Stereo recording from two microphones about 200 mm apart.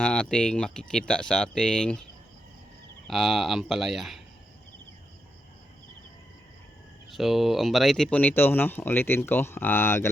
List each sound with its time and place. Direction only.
0.0 s speech: 5° left (ahead or behind)
3.1 s speech: centre (ahead or behind)
7.1 s speech: centre (ahead or behind)